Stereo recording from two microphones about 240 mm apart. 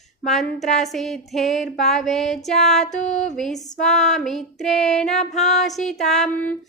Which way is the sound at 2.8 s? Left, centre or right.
Left.